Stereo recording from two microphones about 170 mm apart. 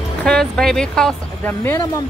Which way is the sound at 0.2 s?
5° left (ahead or behind).